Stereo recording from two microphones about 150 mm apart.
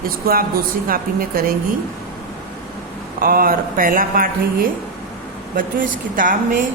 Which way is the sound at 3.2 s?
70° right (ahead or behind).